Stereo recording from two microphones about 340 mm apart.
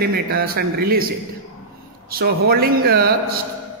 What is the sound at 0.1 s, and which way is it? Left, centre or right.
A man's voice, right.